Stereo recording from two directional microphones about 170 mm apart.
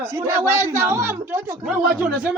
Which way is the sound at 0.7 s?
15° right (ahead or behind).